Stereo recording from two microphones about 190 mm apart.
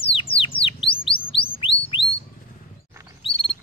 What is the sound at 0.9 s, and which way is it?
Chirp, 30° left (ahead or behind).